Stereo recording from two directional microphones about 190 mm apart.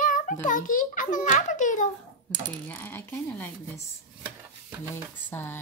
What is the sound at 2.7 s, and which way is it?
Speech, 10° left (ahead or behind).